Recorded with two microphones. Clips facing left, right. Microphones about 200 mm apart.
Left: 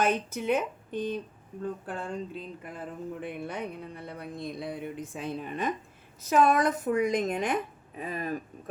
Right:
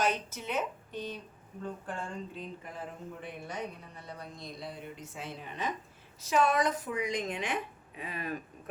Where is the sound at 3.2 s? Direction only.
55° left (ahead or behind).